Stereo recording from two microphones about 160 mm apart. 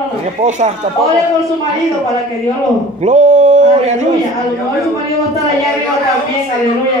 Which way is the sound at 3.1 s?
50° right (ahead or behind).